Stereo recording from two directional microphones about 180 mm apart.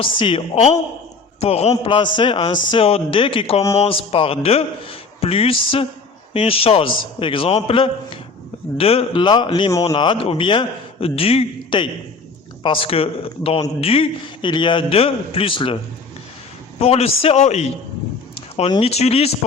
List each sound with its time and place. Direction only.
0.0 s a man's voice: 30° left (ahead or behind)
16.8 s a man's voice: 35° left (ahead or behind)